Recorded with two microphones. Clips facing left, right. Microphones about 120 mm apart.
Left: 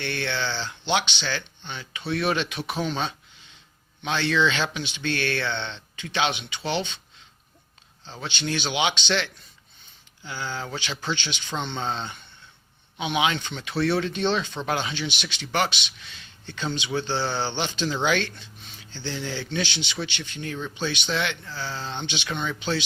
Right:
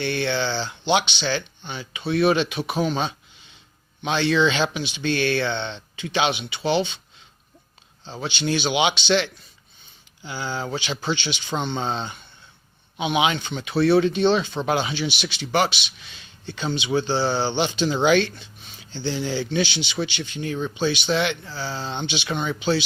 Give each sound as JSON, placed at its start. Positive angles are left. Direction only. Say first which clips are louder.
{"t": 0.0, "sound": "speech", "louder": "right 5 dB", "side_deg": -15}
{"t": 8.0, "sound": "speech", "louder": "right 5 dB", "side_deg": -15}